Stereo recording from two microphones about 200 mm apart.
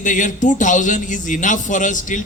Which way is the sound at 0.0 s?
40° left (ahead or behind).